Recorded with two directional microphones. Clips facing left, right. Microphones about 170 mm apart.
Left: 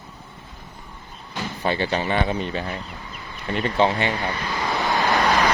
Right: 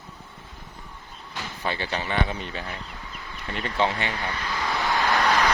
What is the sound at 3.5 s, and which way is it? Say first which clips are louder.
Vehicle: left 5 dB; 25° left (ahead or behind).